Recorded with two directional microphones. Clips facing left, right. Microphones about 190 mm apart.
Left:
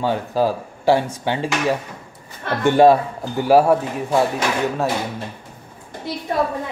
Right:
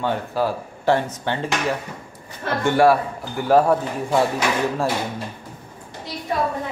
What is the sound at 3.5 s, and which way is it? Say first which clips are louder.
Speech: left 2 dB; 10° left (ahead or behind).